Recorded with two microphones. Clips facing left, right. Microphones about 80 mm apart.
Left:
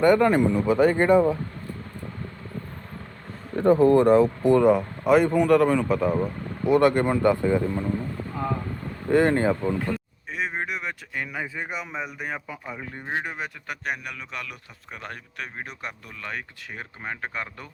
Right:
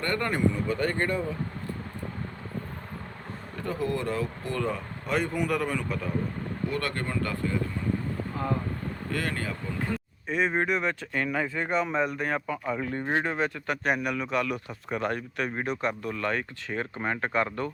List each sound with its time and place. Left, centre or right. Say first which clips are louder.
0.0 s speech: left 9 dB; centre
3.5 s speech: left 14 dB; left; by 5.1 s centre
5.1 s speech: left 9 dB; centre
6.7 s speech: left 14 dB; centre
9.0 s speech: left 13 dB; left
9.9 s speech: right 1 dB; centre
13.9 s speech: right 7 dB; centre